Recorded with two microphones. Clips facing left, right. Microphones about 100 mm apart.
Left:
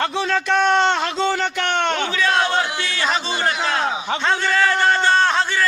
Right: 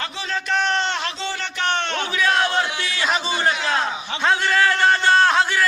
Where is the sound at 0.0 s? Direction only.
65° left (ahead or behind).